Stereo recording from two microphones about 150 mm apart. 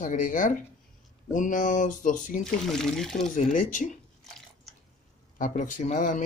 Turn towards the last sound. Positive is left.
turn(degrees=55)  # may be behind; listen again after turning